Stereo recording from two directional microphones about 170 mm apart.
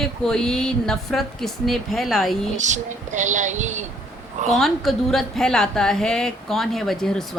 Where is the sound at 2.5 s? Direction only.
45° right (ahead or behind).